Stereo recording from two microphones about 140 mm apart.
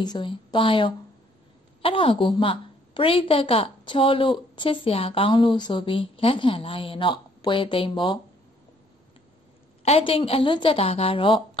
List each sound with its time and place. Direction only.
0.0 s a woman's voice: 35° left (ahead or behind)
9.8 s a woman's voice: 40° left (ahead or behind)